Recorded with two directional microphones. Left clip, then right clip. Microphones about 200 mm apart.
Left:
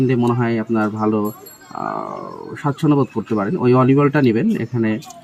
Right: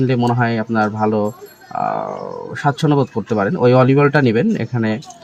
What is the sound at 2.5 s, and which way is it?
Speech, 30° right (ahead or behind).